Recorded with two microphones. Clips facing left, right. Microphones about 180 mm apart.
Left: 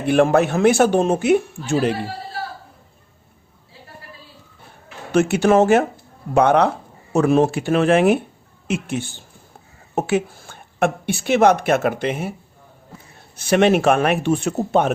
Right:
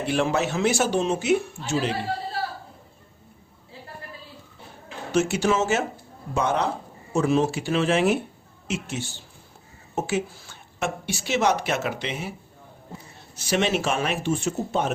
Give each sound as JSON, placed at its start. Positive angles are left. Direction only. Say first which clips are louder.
{"t": 0.0, "sound": "speech", "louder": "left 8 dB", "side_deg": 55}
{"t": 5.1, "sound": "a woman's voice", "louder": "left 7 dB", "side_deg": 60}
{"t": 13.3, "sound": "speech", "louder": "left 8 dB", "side_deg": 55}